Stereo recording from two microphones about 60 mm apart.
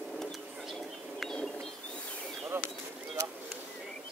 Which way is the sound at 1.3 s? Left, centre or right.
Centre.